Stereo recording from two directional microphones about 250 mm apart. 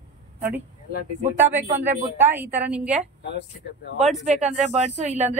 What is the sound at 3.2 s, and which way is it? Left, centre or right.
Speech, left.